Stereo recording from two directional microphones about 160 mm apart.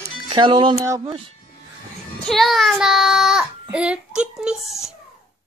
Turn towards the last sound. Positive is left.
turn(degrees=0)  # may be behind; listen again after turning